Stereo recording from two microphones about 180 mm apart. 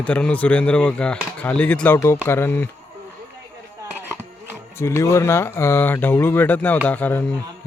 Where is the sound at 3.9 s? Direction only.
10° right (ahead or behind).